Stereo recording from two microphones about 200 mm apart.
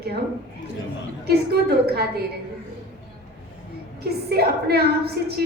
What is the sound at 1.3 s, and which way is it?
Speech, 55° right (ahead or behind).